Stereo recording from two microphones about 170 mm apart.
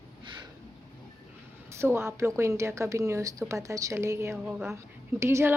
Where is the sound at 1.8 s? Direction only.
15° right (ahead or behind).